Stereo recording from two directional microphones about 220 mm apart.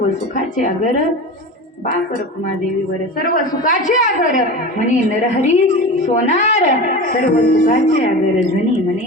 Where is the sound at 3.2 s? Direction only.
40° left (ahead or behind).